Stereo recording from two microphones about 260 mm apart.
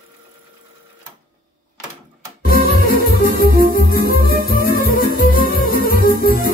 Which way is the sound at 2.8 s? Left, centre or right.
Left.